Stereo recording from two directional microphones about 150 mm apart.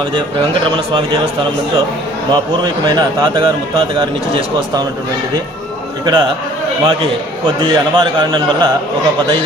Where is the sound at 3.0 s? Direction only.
30° right (ahead or behind).